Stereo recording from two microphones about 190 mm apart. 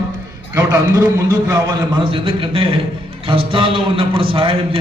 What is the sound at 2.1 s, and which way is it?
A man's voice, 30° right (ahead or behind).